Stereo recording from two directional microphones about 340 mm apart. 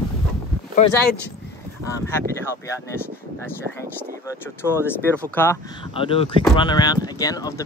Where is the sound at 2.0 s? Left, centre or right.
Centre.